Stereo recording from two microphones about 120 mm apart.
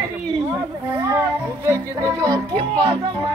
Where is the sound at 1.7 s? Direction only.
30° right (ahead or behind).